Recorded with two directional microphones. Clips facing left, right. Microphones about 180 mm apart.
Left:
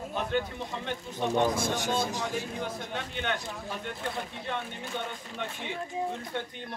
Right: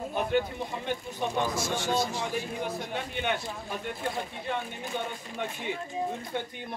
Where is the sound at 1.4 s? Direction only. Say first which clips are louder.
Left 5 dB; 55° left (ahead or behind).